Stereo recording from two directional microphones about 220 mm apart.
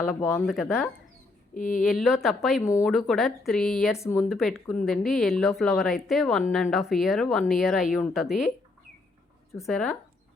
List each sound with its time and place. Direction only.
0.2 s speech: 15° left (ahead or behind)
0.4 s a woman's voice: centre (ahead or behind)
1.5 s speech: 35° left (ahead or behind)
1.8 s a woman's voice: centre (ahead or behind)
3.9 s speech: 15° left (ahead or behind)
4.2 s a woman's voice: centre (ahead or behind)
9.6 s a woman's voice: 5° left (ahead or behind)